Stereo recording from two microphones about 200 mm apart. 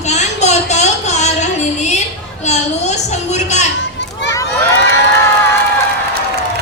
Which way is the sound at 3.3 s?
35° left (ahead or behind).